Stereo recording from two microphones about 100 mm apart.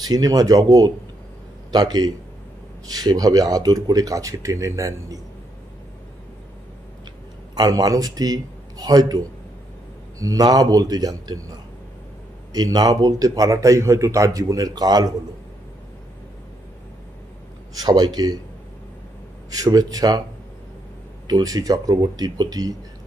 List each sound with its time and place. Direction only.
0.1 s speech: 35° right (ahead or behind)
7.5 s a man's voice: 40° right (ahead or behind)
12.5 s speech: 40° right (ahead or behind)
17.7 s speech: 45° right (ahead or behind)
19.5 s speech: 40° right (ahead or behind)
21.3 s speech: 40° right (ahead or behind)